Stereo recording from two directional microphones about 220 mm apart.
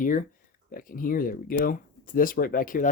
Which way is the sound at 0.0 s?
35° left (ahead or behind).